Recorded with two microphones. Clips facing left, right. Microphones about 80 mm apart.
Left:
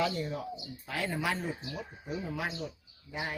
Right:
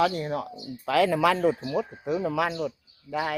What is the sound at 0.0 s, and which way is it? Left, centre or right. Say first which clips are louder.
Speech: right 7 dB; right.